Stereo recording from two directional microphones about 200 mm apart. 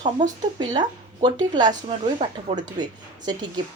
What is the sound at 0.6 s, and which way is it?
Speech, 20° right (ahead or behind).